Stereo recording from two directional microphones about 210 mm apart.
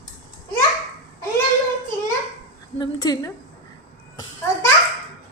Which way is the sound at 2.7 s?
20° left (ahead or behind).